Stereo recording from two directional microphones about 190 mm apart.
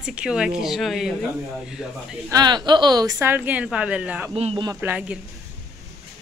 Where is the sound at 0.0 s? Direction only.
5° right (ahead or behind).